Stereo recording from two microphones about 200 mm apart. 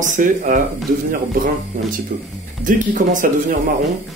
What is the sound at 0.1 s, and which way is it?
Speech, 40° right (ahead or behind).